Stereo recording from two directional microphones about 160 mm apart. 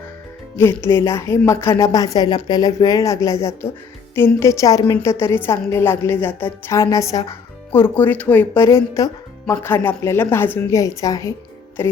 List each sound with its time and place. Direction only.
0.5 s a woman's voice: 15° left (ahead or behind)